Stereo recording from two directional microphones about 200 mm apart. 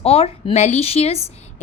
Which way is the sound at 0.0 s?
30° left (ahead or behind).